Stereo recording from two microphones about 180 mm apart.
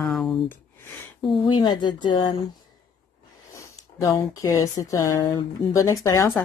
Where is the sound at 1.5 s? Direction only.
25° left (ahead or behind).